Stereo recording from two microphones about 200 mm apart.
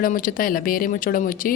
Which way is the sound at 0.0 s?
45° left (ahead or behind).